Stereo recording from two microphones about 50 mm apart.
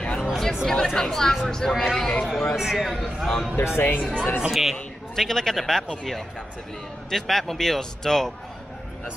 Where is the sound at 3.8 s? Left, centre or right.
Left.